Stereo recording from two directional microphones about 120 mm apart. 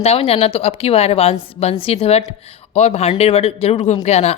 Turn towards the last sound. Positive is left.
turn(degrees=65)  # may be behind; listen again after turning